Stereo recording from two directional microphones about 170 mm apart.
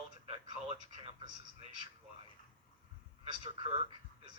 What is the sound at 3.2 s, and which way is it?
Speech, 25° right (ahead or behind).